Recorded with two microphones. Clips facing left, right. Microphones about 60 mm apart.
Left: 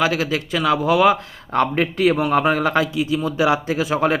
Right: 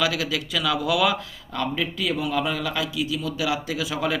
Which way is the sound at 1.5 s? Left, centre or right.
Left.